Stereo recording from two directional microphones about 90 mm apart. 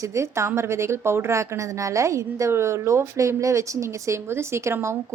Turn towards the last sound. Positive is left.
turn(degrees=-30)  # may be behind; listen again after turning